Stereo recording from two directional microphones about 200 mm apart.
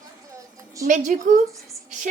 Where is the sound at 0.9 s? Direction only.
40° right (ahead or behind).